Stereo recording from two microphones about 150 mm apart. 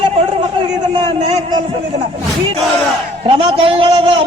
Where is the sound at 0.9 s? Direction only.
40° right (ahead or behind).